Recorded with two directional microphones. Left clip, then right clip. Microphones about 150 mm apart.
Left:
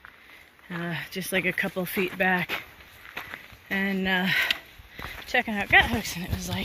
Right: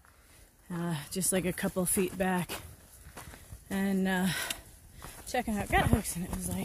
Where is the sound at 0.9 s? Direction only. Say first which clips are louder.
Left 4 dB; 30° right (ahead or behind).